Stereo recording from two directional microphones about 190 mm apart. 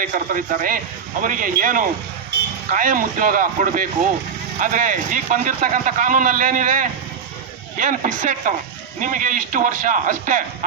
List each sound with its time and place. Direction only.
0.0 s speech: 45° right (ahead or behind)